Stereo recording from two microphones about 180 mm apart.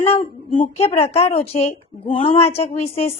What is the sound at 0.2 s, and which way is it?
A woman's voice, 30° left (ahead or behind).